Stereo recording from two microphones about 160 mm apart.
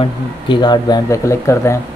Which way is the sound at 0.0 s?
30° left (ahead or behind).